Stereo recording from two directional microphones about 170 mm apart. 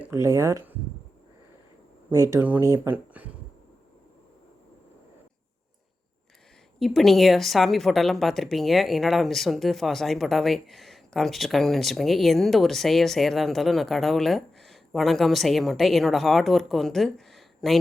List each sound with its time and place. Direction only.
0.0 s speech: 15° right (ahead or behind)
2.0 s speech: 15° right (ahead or behind)
6.7 s a woman's voice: centre (ahead or behind)